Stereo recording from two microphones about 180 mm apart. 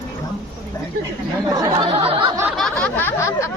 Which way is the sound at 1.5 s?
25° right (ahead or behind).